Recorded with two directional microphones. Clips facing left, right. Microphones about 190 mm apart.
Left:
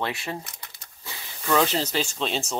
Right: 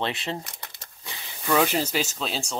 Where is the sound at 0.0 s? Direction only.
25° right (ahead or behind).